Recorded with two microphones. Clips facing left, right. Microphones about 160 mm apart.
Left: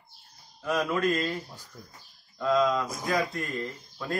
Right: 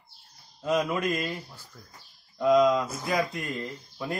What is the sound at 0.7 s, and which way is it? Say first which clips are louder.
A man's voice: even; 20° right (ahead or behind).